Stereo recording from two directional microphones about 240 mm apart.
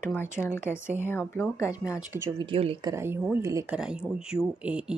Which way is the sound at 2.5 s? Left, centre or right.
Right.